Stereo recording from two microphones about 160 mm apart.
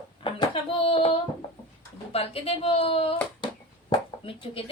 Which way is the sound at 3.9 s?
35° left (ahead or behind).